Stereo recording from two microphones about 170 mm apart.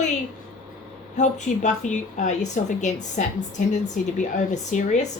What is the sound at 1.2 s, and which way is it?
Speech, 45° left (ahead or behind).